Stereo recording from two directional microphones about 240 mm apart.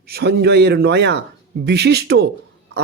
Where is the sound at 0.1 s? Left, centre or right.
Right.